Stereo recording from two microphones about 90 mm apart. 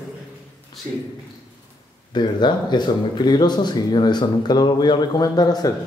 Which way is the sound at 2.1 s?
55° left (ahead or behind).